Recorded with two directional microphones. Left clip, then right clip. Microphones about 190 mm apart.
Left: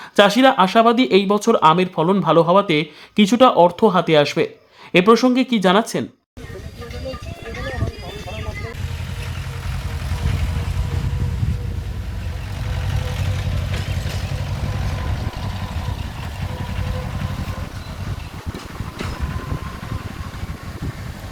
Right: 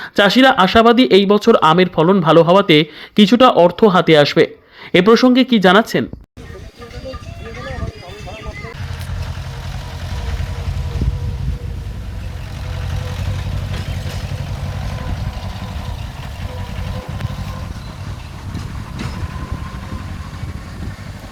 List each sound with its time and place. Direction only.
0.0 s speech: 15° right (ahead or behind)
12.9 s vehicle: 25° right (ahead or behind)
13.7 s vehicle: 35° right (ahead or behind)
14.8 s vehicle: 55° right (ahead or behind)